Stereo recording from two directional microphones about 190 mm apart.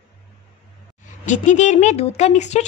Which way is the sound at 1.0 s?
40° left (ahead or behind).